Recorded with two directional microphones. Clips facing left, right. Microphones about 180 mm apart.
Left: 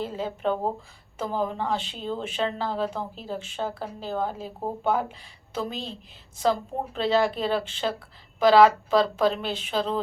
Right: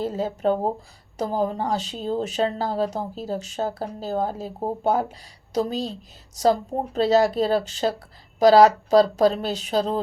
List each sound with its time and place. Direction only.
0.0 s speech: 40° right (ahead or behind)